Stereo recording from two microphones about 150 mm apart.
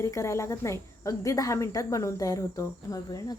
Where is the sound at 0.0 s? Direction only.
20° left (ahead or behind).